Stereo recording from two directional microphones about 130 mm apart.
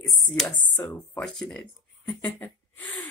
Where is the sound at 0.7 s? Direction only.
10° left (ahead or behind).